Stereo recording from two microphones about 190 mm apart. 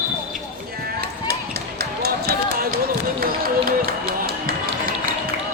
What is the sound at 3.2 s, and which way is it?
Music, 50° right (ahead or behind).